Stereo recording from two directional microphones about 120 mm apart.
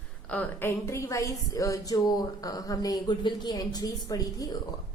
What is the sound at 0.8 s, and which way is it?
A woman's voice, 25° left (ahead or behind).